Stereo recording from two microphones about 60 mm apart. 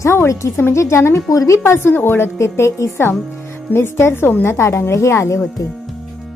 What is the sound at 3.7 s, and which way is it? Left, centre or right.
A woman's voice, left.